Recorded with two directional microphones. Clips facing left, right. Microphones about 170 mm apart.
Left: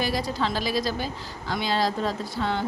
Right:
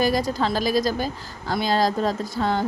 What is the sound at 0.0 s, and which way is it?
A woman's voice, 45° right (ahead or behind).